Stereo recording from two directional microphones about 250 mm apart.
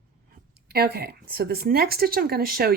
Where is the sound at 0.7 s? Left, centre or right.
Right.